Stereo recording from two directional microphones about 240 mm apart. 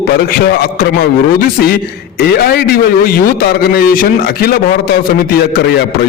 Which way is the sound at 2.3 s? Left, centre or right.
Left.